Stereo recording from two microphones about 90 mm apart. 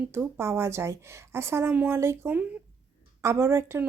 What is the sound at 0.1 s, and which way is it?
Speech, 25° right (ahead or behind).